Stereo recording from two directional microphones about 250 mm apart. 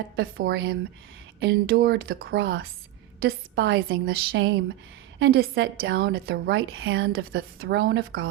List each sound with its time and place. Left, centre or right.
0.2 s a woman's voice: right
7.1 s a woman's voice: right